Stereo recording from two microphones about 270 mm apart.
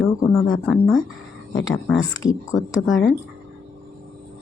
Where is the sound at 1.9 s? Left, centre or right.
Left.